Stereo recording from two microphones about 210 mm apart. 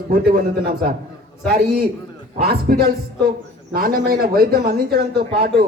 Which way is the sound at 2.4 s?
50° right (ahead or behind).